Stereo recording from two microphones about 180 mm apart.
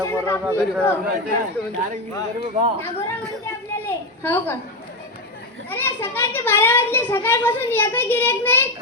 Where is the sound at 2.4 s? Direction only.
35° right (ahead or behind).